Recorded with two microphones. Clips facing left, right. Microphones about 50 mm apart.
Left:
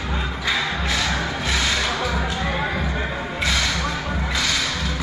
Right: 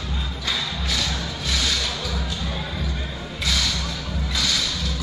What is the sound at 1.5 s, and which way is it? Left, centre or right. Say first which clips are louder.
Music: left 2 dB; left.